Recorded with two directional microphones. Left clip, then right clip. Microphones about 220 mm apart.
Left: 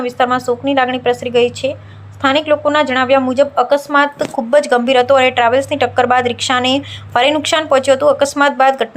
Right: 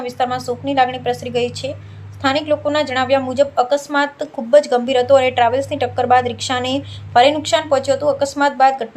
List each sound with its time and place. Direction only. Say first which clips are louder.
0.0 s a woman's voice: left 5 dB; 20° left (ahead or behind)